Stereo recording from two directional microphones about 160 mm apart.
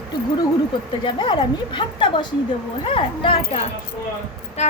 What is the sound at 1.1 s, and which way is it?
A woman's voice, 30° left (ahead or behind).